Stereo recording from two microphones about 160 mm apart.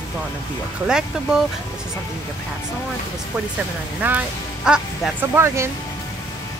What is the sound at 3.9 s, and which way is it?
Speech, 10° right (ahead or behind).